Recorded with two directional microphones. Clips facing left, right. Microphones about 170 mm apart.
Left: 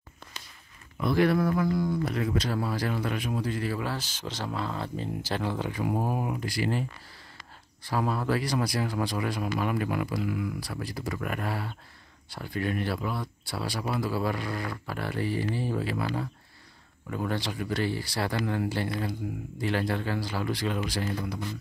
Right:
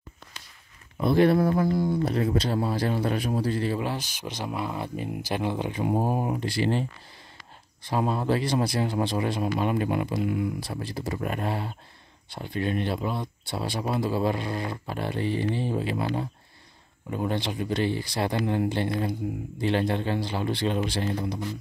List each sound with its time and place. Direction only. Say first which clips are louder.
0.9 s speech: right 4 dB; 25° right (ahead or behind)